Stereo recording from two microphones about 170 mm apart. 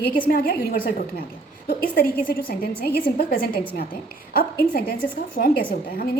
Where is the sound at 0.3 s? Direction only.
60° left (ahead or behind).